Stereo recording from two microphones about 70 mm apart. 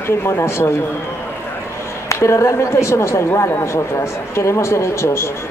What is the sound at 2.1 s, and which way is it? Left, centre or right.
A woman's voice, left.